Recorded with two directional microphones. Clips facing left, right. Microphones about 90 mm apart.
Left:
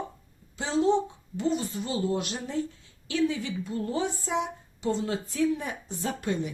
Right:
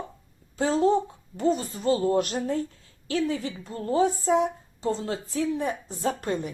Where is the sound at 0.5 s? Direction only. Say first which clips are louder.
Right 2 dB; 45° right (ahead or behind).